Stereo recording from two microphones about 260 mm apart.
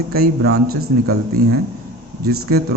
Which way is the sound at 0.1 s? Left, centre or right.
Right.